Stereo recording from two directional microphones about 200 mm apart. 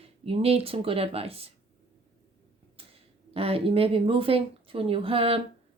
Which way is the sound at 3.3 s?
30° right (ahead or behind).